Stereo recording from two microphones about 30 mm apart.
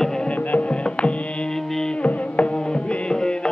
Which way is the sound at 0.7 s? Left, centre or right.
Left.